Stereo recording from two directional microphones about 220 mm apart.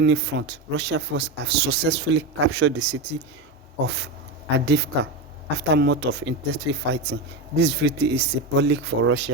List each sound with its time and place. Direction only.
0.0 s speech: 50° right (ahead or behind)